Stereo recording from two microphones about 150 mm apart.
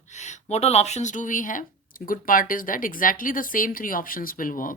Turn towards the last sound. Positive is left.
turn(degrees=65)  # may be behind; listen again after turning